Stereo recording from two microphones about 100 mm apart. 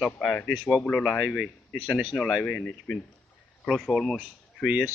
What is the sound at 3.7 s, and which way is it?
Speech, 5° right (ahead or behind).